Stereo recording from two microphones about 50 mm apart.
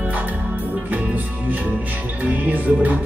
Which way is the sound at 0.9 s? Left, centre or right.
Right.